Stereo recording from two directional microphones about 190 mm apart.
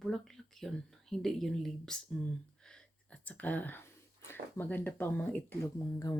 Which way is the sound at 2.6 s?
5° left (ahead or behind).